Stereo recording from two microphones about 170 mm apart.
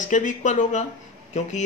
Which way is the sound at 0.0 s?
50° left (ahead or behind).